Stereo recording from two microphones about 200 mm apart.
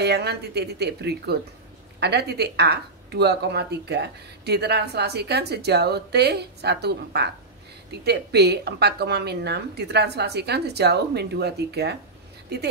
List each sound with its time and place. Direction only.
0.0 s speech: 55° right (ahead or behind)